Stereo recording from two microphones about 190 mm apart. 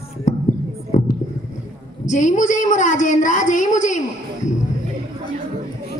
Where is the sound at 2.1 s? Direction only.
40° left (ahead or behind).